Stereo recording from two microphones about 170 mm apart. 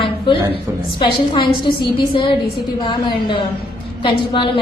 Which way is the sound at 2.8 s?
30° left (ahead or behind).